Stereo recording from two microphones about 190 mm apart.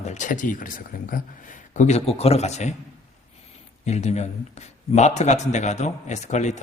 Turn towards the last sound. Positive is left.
turn(degrees=35)  # may be behind; listen again after turning